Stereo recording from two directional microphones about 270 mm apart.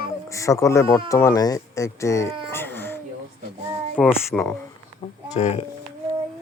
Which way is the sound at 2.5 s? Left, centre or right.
Centre.